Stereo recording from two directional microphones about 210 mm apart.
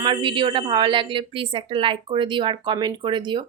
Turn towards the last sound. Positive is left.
turn(degrees=-20)  # may be behind; listen again after turning